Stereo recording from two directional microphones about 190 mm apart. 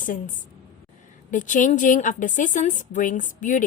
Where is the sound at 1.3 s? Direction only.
40° left (ahead or behind).